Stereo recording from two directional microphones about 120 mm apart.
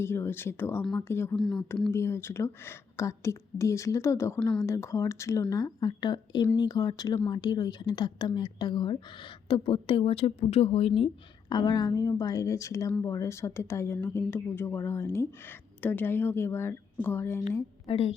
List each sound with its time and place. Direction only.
0.0 s speech: 20° left (ahead or behind)
1.4 s speech: 5° left (ahead or behind)
1.9 s speech: 20° left (ahead or behind)
4.4 s speech: 10° left (ahead or behind)
4.6 s a woman's voice: 25° left (ahead or behind); by 11.1 s 55° left (ahead or behind)
11.4 s speech: 35° left (ahead or behind); by 17.7 s 20° left (ahead or behind)
17.8 s a woman's voice: 55° left (ahead or behind)